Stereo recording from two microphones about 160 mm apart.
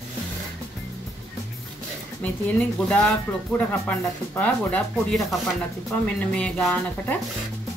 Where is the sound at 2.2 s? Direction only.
5° left (ahead or behind).